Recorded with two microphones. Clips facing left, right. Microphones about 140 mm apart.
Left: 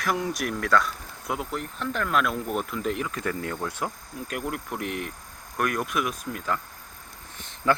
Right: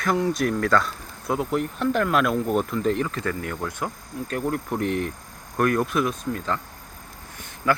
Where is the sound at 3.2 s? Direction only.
20° left (ahead or behind).